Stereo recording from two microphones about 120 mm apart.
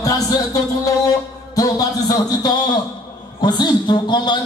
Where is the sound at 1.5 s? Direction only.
30° left (ahead or behind).